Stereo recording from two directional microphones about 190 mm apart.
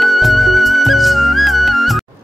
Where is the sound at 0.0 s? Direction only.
Centre (ahead or behind).